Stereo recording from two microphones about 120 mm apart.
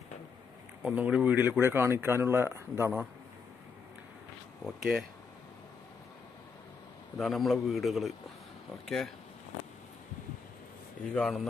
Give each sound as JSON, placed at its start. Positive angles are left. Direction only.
{"t": 0.8, "sound": "speech", "side_deg": -10}
{"t": 4.6, "sound": "a man's voice", "side_deg": -5}
{"t": 7.2, "sound": "a man's voice", "side_deg": 0}
{"t": 11.1, "sound": "speech", "side_deg": 10}